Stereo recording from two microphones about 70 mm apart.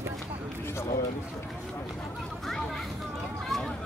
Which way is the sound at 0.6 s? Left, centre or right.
Left.